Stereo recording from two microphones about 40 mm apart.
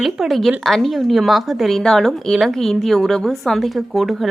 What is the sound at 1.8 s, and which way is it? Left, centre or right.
A woman's voice, centre.